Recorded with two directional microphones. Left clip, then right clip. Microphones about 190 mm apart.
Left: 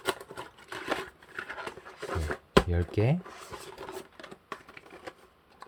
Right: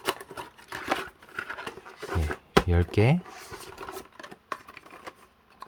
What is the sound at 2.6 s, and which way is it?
Speech, 20° right (ahead or behind).